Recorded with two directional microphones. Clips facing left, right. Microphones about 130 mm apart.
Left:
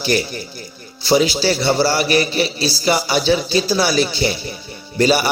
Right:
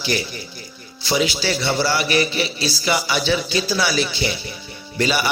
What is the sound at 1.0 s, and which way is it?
A man's voice, 40° left (ahead or behind).